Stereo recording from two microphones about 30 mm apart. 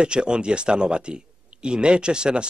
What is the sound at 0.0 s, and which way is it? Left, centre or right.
A man's voice, right.